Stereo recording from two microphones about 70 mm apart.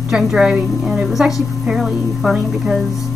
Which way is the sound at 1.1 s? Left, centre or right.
Centre.